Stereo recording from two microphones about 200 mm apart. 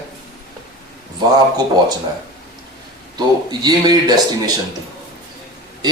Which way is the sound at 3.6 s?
20° right (ahead or behind).